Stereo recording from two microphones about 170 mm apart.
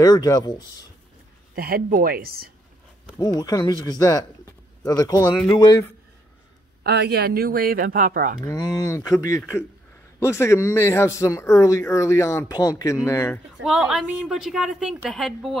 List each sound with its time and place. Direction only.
0.0 s speech: 20° left (ahead or behind)
1.5 s speech: 60° right (ahead or behind)
3.2 s speech: 20° left (ahead or behind)
6.8 s speech: 70° right (ahead or behind); by 8.4 s 55° right (ahead or behind)
8.5 s a man's voice: 20° left (ahead or behind)
13.6 s speech: 5° right (ahead or behind)